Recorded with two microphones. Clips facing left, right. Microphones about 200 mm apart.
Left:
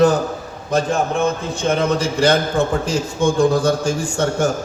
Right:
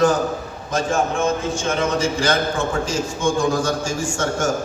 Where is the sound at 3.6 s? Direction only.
60° left (ahead or behind).